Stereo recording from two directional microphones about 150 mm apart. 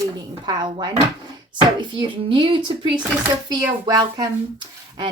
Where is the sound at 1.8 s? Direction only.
30° right (ahead or behind).